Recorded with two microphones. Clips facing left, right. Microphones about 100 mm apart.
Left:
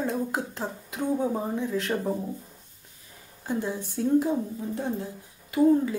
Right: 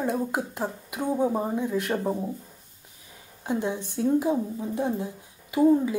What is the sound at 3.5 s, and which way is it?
A woman's voice, 20° right (ahead or behind).